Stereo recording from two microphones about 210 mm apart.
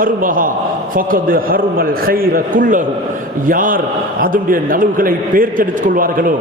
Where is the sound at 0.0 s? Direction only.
40° right (ahead or behind).